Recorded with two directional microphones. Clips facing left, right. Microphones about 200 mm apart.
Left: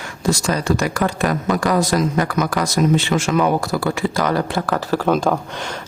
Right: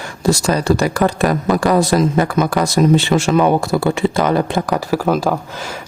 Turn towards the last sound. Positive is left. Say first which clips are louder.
# right 1 dB
turn(degrees=-5)  # may be behind; listen again after turning